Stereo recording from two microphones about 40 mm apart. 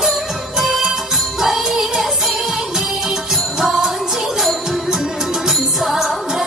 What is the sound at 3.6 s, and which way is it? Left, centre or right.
Music, centre.